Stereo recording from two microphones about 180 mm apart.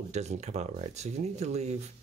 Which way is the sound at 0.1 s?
40° right (ahead or behind).